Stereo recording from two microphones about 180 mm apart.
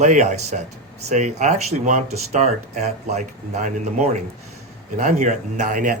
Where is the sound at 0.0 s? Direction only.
40° right (ahead or behind).